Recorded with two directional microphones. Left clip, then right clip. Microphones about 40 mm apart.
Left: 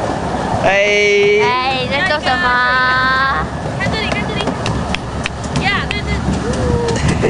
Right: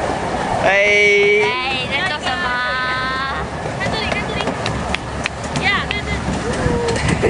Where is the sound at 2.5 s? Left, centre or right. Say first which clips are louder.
Left 7 dB; left.